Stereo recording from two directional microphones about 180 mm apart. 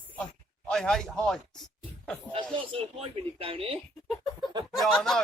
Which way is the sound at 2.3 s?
30° right (ahead or behind).